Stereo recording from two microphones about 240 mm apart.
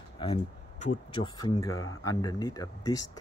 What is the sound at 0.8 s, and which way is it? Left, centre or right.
Speech, centre.